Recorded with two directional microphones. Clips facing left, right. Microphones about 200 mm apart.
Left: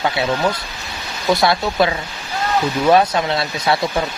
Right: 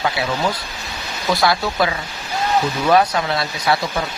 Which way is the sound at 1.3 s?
25° left (ahead or behind).